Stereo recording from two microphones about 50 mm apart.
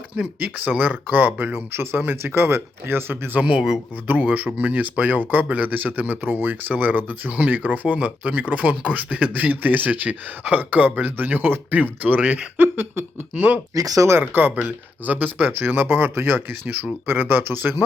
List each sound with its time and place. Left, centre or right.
0.1 s speech: right
0.8 s speech: right
3.4 s speech: right
4.0 s speech: right
14.6 s speech: right
15.4 s speech: right